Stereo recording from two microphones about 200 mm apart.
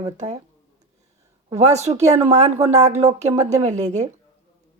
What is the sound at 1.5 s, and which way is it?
Speech, 35° right (ahead or behind).